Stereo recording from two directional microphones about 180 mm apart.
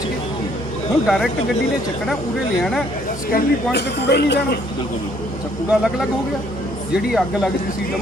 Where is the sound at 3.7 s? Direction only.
70° left (ahead or behind).